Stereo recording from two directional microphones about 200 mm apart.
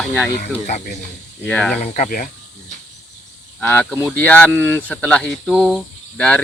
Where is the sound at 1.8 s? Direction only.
35° left (ahead or behind).